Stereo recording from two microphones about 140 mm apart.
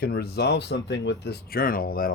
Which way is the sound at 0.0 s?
90° left.